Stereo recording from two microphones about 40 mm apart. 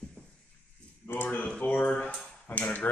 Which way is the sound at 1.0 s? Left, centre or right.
Left.